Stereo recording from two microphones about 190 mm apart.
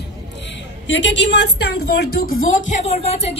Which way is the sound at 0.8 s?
70° left (ahead or behind).